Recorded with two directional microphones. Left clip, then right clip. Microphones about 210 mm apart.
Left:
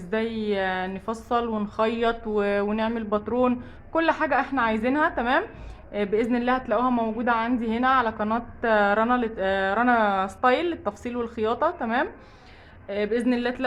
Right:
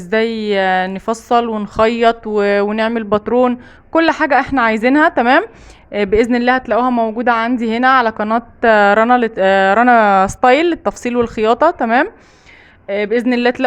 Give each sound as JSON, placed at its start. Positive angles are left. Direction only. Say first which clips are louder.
{"t": 0.0, "sound": "a woman's voice", "louder": "right 11 dB", "side_deg": -45}